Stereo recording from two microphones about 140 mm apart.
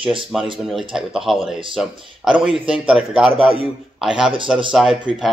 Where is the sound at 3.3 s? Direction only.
40° right (ahead or behind).